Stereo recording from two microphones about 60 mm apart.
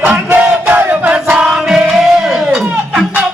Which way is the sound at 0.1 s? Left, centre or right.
Right.